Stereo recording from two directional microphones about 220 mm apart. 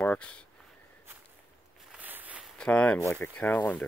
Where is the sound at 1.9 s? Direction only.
10° right (ahead or behind).